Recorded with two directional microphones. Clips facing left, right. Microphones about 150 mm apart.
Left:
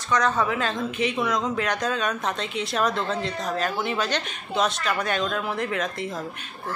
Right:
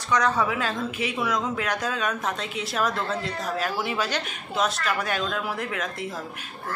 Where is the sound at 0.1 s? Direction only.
10° right (ahead or behind).